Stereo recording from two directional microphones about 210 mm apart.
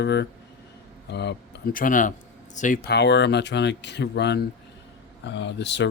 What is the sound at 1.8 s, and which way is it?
Speech, 40° left (ahead or behind).